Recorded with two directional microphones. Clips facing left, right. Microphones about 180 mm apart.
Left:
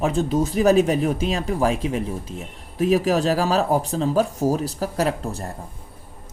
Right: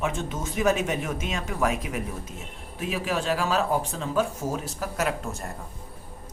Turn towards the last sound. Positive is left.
turn(degrees=35)  # may be behind; listen again after turning